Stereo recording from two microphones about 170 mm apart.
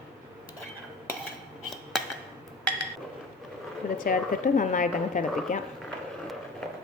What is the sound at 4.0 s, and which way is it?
Speech, 55° left (ahead or behind).